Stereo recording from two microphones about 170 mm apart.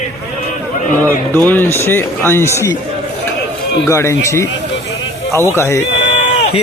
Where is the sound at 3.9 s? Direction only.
15° left (ahead or behind).